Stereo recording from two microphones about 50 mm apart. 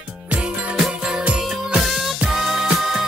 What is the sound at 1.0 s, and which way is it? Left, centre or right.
Music, centre.